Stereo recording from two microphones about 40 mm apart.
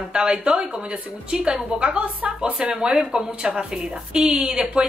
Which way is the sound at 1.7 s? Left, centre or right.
Right.